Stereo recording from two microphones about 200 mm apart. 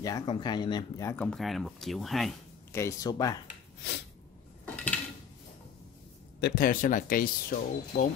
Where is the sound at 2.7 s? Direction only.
15° left (ahead or behind).